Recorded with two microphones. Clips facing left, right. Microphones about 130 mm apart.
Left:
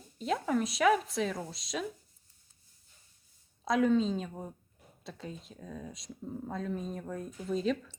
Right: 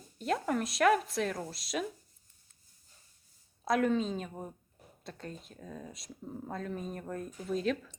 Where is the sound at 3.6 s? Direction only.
Centre (ahead or behind).